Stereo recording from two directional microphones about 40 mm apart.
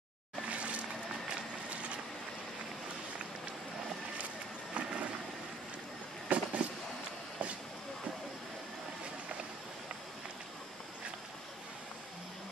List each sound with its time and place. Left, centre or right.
1.7 s vehicle: right
4.7 s vehicle: right
6.2 s vehicle: right